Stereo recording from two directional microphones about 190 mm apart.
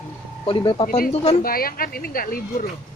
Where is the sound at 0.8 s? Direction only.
50° left (ahead or behind).